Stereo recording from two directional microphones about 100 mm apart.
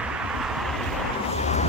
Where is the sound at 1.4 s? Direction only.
90° left.